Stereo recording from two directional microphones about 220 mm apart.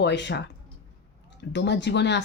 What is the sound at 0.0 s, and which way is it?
Speech, 50° left (ahead or behind).